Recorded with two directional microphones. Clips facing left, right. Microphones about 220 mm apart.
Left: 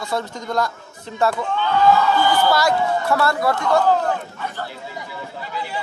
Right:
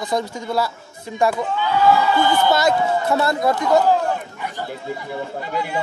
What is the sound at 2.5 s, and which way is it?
Speech, 20° right (ahead or behind).